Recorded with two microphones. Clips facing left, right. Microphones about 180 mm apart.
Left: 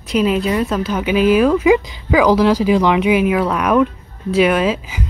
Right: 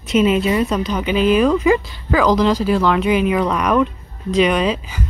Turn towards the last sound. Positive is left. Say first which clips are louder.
# left 2 dB
turn(degrees=5)  # may be behind; listen again after turning